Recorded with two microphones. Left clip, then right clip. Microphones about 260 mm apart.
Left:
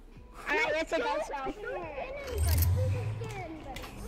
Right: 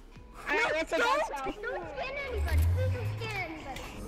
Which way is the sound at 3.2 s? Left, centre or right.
Right.